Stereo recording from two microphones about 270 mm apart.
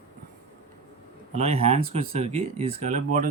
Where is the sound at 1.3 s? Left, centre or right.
Right.